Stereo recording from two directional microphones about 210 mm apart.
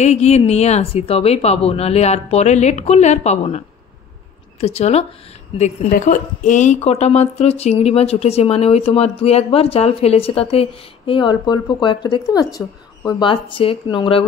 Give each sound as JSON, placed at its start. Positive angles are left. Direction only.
{"t": 0.0, "sound": "a woman's voice", "side_deg": 30}